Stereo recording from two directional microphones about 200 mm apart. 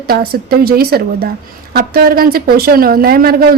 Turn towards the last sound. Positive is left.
turn(degrees=-50)  # may be behind; listen again after turning